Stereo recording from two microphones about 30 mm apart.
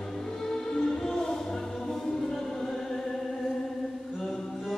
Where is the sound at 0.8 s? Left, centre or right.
Centre.